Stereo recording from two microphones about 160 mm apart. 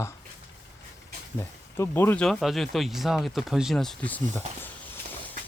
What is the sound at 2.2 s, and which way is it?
Speech, centre (ahead or behind).